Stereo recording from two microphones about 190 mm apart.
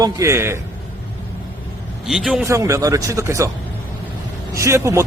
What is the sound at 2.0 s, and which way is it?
Speech, 5° right (ahead or behind).